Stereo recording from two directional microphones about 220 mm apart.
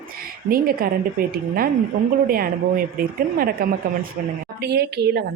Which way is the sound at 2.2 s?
40° right (ahead or behind).